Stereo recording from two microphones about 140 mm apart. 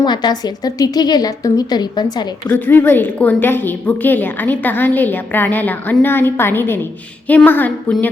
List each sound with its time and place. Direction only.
0.0 s a woman's voice: 30° left (ahead or behind)
2.5 s a woman's voice: 15° left (ahead or behind)